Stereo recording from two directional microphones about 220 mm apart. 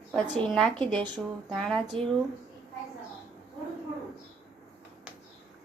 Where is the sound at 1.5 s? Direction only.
Centre (ahead or behind).